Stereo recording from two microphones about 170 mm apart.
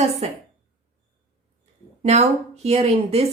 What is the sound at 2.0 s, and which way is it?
A woman's voice, 40° right (ahead or behind).